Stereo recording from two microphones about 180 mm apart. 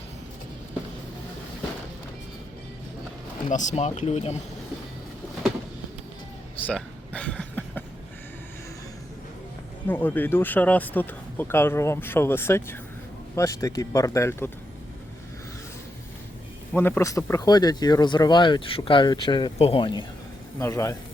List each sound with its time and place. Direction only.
3.5 s speech: 45° left (ahead or behind)
6.7 s a sound: 5° left (ahead or behind)
9.8 s speech: 10° left (ahead or behind)
16.7 s speech: 10° left (ahead or behind)
20.6 s speech: 15° left (ahead or behind)